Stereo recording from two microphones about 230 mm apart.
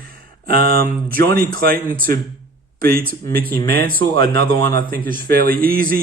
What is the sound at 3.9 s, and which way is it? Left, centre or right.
Speech, centre.